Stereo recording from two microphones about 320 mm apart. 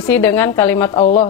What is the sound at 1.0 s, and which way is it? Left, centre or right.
Speech, left.